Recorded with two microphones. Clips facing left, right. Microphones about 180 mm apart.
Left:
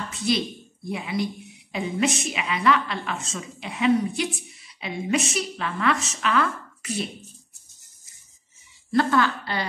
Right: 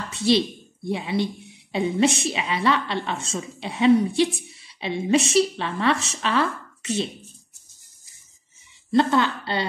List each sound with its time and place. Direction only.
0.1 s a sound: 30° right (ahead or behind)
0.8 s a woman's voice: 30° right (ahead or behind)
8.9 s a woman's voice: 25° right (ahead or behind)